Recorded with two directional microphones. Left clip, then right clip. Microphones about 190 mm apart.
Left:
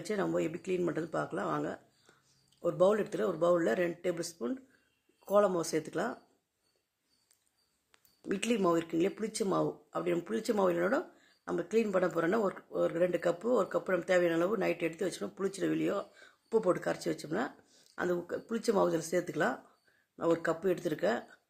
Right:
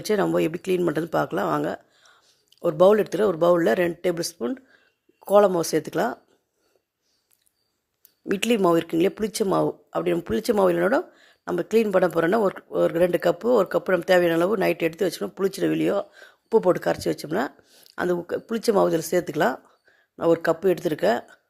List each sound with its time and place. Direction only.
0.0 s speech: 45° right (ahead or behind)
8.3 s speech: 45° right (ahead or behind)